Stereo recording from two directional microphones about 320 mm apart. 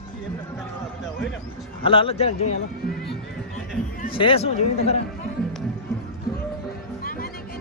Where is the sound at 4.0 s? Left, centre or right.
Left.